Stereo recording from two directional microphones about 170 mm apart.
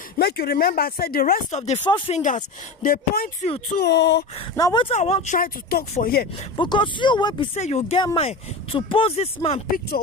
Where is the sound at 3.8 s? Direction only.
80° left.